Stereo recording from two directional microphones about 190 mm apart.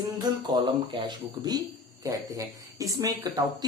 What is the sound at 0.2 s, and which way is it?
A woman's voice, 25° right (ahead or behind).